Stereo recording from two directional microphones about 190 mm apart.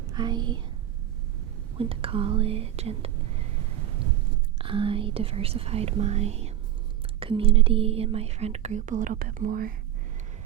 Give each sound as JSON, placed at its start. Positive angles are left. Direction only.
{"t": 0.1, "sound": "speech", "side_deg": -25}
{"t": 1.8, "sound": "speech", "side_deg": -30}
{"t": 4.5, "sound": "speech", "side_deg": -30}